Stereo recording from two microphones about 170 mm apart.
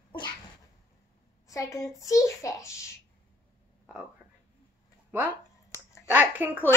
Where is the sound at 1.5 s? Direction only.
20° left (ahead or behind).